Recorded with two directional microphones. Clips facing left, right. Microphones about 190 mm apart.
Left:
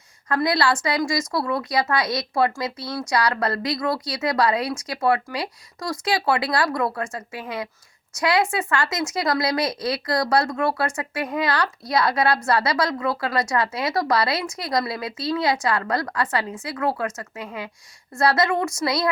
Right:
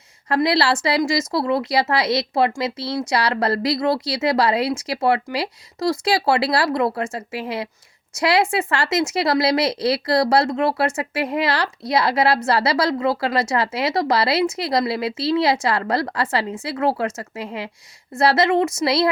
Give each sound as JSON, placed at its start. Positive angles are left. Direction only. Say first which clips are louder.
{"t": 0.3, "sound": "speech", "louder": "right 3 dB", "side_deg": -25}